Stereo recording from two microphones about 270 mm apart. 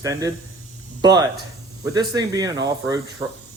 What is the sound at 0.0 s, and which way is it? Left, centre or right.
Speech, centre.